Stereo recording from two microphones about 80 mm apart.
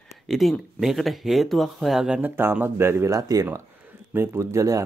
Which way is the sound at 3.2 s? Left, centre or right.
Right.